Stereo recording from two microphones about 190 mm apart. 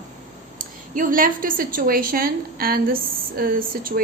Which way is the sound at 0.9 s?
45° right (ahead or behind).